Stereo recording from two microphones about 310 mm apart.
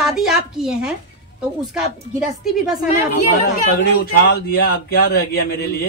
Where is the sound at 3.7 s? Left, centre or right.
Left.